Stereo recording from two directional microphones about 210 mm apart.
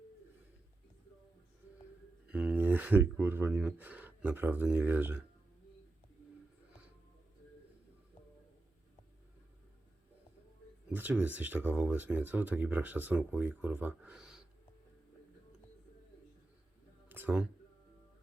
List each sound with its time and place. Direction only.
2.2 s speech: 5° right (ahead or behind)
10.8 s speech: 5° right (ahead or behind)
17.1 s a sound: 10° right (ahead or behind)